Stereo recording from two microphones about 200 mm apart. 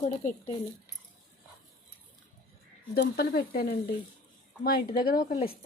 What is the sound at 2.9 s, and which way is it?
Speech, 50° left (ahead or behind).